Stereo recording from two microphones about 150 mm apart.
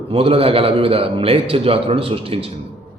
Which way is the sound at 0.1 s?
40° right (ahead or behind).